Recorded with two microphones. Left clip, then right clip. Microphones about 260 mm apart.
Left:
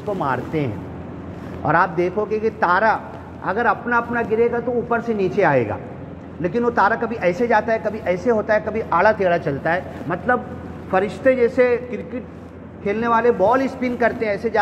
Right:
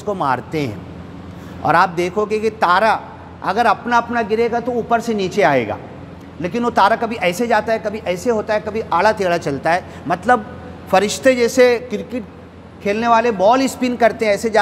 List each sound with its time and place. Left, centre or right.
0.2 s speech: right